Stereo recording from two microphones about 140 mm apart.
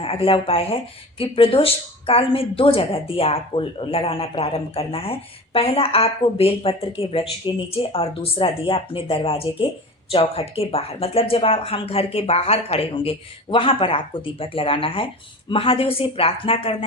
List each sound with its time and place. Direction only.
0.0 s speech: 40° left (ahead or behind)